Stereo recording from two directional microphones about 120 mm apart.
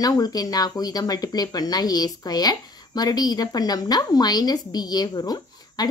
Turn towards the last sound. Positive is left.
turn(degrees=35)  # may be behind; listen again after turning